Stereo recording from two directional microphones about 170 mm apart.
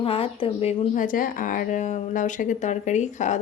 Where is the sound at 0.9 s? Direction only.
50° left (ahead or behind).